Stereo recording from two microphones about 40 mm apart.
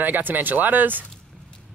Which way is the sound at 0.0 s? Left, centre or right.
Right.